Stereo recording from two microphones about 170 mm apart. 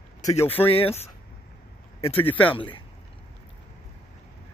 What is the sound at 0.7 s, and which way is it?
Speech, 35° left (ahead or behind).